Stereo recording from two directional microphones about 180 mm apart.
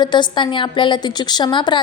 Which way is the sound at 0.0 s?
25° left (ahead or behind).